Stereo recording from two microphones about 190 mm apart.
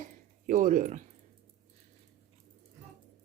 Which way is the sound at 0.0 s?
45° right (ahead or behind).